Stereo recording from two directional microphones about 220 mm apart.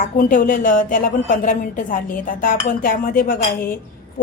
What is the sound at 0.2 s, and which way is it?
A woman's voice, 40° left (ahead or behind).